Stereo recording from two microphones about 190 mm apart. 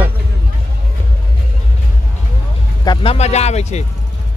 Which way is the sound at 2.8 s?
30° left (ahead or behind).